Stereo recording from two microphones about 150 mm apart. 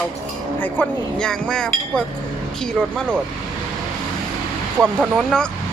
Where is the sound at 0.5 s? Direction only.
10° left (ahead or behind).